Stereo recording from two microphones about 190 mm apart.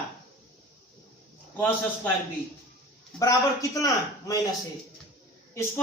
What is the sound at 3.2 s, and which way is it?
A woman's voice, 15° left (ahead or behind).